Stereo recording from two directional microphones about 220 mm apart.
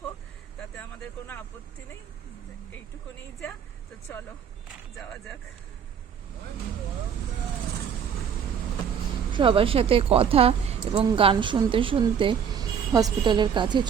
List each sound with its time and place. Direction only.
9.3 s speech: 25° right (ahead or behind)